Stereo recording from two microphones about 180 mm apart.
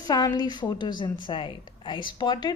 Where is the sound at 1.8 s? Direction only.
25° left (ahead or behind).